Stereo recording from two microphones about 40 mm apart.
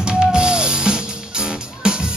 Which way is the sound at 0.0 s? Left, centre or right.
Right.